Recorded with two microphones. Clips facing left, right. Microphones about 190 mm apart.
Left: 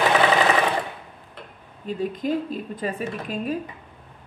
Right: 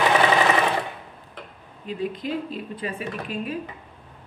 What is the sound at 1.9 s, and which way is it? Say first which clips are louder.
A woman's voice: left 3 dB; 45° left (ahead or behind).